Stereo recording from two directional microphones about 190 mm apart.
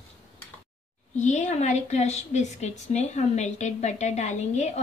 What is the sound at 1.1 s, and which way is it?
A woman's voice, 40° left (ahead or behind).